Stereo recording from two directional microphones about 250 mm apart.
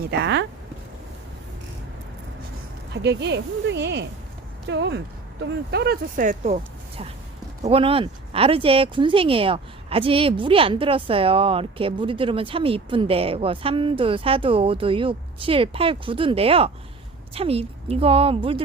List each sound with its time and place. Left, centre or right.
0.1 s speech: right
2.9 s speech: right
7.6 s speech: right